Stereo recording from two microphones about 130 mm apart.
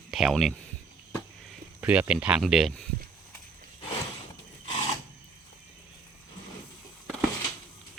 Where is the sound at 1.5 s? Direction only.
10° right (ahead or behind).